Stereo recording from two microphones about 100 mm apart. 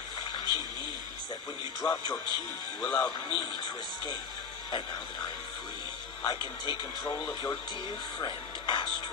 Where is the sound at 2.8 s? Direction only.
15° left (ahead or behind).